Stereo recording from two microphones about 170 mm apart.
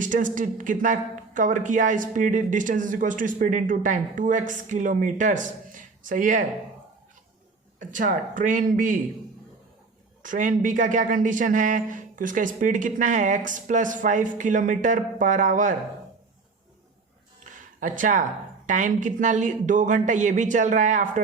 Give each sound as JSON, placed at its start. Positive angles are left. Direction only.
{"t": 0.0, "sound": "speech", "side_deg": -50}
{"t": 7.8, "sound": "speech", "side_deg": -50}
{"t": 10.2, "sound": "speech", "side_deg": -50}
{"t": 17.4, "sound": "speech", "side_deg": -50}